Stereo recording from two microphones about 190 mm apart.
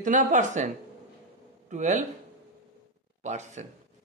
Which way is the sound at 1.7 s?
40° right (ahead or behind).